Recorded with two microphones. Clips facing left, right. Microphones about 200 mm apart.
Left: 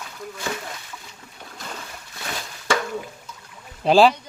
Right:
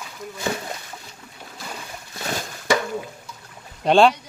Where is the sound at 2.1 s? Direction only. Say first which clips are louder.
Right 5 dB; 40° right (ahead or behind).